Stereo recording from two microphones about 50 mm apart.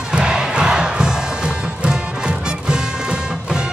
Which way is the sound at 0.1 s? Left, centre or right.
Centre.